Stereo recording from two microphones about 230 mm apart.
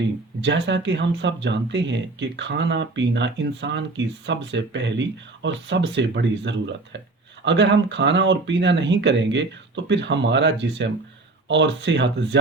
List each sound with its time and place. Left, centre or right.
0.4 s speech: right